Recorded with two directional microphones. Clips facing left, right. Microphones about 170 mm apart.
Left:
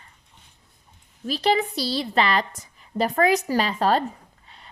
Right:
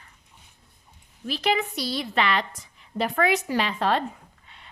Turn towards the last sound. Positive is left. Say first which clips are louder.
# left 2 dB
turn(degrees=40)  # may be behind; listen again after turning